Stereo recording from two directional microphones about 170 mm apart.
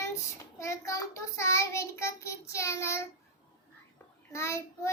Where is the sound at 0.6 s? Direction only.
15° left (ahead or behind).